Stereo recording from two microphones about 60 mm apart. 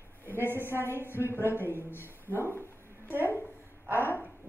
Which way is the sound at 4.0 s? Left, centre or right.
Left.